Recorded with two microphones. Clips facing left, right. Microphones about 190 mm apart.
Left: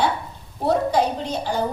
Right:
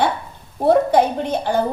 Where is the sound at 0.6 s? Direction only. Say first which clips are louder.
Right 5 dB; 55° right (ahead or behind).